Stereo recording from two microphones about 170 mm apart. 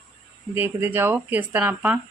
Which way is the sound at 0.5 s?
10° right (ahead or behind).